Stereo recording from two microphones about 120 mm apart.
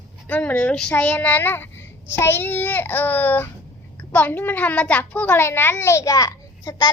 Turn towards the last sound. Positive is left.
turn(degrees=30)  # may be behind; listen again after turning